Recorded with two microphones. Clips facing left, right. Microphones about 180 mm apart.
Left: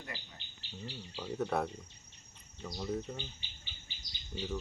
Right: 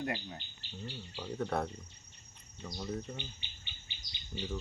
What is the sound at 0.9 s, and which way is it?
Speech, centre (ahead or behind).